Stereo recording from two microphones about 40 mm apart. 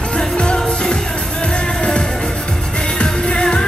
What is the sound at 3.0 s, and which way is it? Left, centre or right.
Music, left.